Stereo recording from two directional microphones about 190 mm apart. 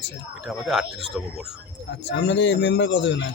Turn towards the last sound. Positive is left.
turn(degrees=70)  # may be behind; listen again after turning